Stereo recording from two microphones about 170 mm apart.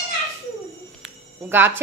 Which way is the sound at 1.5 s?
10° right (ahead or behind).